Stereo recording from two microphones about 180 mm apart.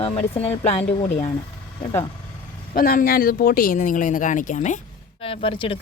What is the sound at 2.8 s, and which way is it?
Speech, 50° left (ahead or behind).